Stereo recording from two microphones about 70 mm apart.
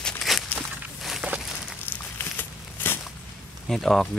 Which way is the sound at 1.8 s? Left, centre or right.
Left.